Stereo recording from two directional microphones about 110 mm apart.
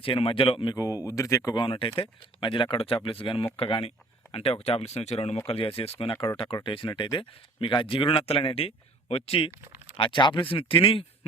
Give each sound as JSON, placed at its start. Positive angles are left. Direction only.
{"t": 0.0, "sound": "speech", "side_deg": 55}
{"t": 0.8, "sound": "speech", "side_deg": 30}
{"t": 1.5, "sound": "speech", "side_deg": 50}
{"t": 5.5, "sound": "speech", "side_deg": 60}
{"t": 10.0, "sound": "a man's voice", "side_deg": 50}